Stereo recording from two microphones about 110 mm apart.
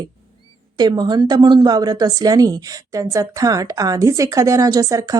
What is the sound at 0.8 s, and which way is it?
A woman's voice, 40° right (ahead or behind).